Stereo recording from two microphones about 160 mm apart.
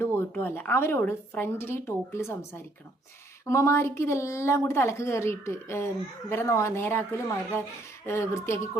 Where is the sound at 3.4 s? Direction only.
20° left (ahead or behind).